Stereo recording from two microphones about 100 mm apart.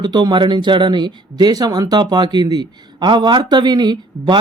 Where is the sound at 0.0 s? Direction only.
45° right (ahead or behind).